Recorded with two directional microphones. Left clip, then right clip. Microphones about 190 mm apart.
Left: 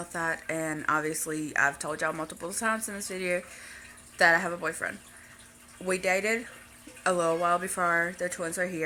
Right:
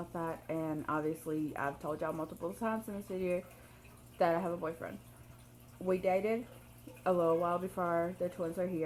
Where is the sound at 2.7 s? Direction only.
5° left (ahead or behind).